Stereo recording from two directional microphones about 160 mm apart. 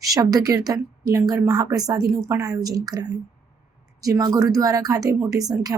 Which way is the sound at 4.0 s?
25° right (ahead or behind).